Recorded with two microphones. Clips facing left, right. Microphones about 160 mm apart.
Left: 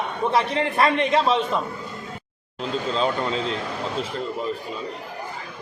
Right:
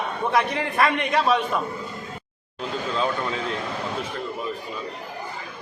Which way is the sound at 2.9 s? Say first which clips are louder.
Left 2 dB; 25° left (ahead or behind).